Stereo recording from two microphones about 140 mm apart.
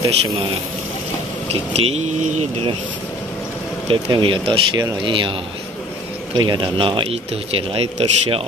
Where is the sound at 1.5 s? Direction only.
45° right (ahead or behind).